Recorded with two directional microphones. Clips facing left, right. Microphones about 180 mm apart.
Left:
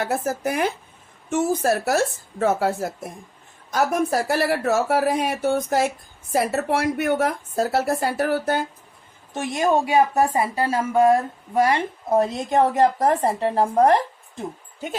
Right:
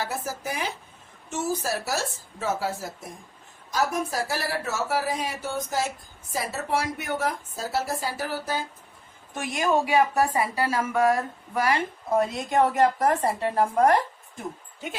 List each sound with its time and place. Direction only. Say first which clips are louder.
0.0 s a woman's voice: left 7 dB; 55° left (ahead or behind)
9.3 s a woman's voice: left 4 dB; 25° left (ahead or behind)